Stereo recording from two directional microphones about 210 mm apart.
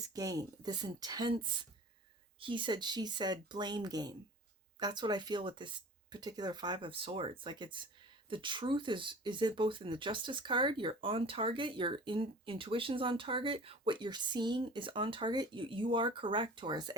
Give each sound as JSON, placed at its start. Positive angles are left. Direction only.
{"t": 0.1, "sound": "speech", "side_deg": -15}